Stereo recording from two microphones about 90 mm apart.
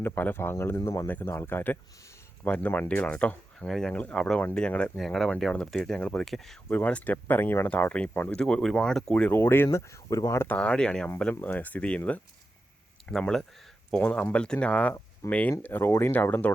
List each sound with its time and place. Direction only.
0.0 s speech: 20° left (ahead or behind); by 6.6 s centre (ahead or behind)
6.7 s speech: 15° left (ahead or behind)
9.1 s speech: 20° left (ahead or behind); by 10.4 s 35° left (ahead or behind)
10.4 s speech: 15° left (ahead or behind)